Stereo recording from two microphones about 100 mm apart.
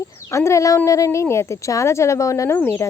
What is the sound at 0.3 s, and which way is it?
Speech, 30° left (ahead or behind).